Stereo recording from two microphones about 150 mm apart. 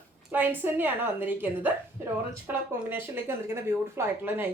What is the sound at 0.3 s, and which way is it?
A woman's voice, 15° right (ahead or behind).